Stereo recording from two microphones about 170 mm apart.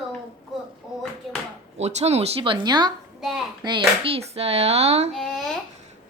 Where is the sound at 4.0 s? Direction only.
35° right (ahead or behind).